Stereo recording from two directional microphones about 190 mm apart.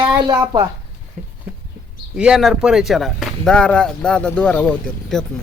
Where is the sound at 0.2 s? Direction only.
20° right (ahead or behind).